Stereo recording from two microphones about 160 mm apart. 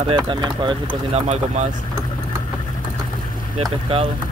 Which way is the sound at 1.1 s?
45° right (ahead or behind).